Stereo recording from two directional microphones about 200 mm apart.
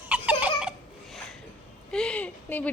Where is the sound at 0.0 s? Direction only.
10° right (ahead or behind).